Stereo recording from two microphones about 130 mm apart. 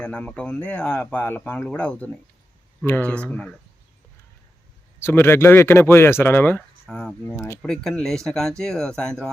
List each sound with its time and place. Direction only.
0.0 s speech: 10° left (ahead or behind)
4.9 s speech: 20° left (ahead or behind)
7.3 s speech: 20° left (ahead or behind)
7.6 s speech: 5° left (ahead or behind)